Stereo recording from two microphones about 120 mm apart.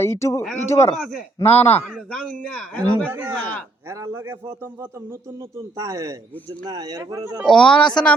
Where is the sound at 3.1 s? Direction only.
20° right (ahead or behind).